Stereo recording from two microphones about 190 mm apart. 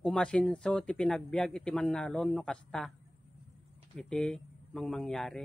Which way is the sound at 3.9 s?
5° left (ahead or behind).